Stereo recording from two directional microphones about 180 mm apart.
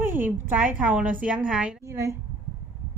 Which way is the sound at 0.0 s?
10° right (ahead or behind).